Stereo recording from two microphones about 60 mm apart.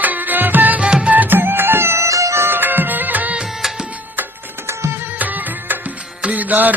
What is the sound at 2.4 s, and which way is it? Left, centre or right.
Music, right.